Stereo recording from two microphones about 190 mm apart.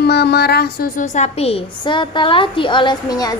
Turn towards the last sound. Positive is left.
turn(degrees=20)  # may be behind; listen again after turning